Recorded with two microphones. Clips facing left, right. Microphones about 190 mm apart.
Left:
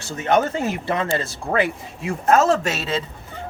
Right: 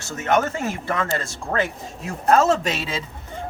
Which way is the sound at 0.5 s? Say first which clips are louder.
Left 2 dB; 25° left (ahead or behind).